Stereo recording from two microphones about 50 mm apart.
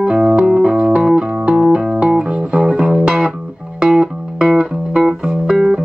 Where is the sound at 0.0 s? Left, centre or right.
Centre.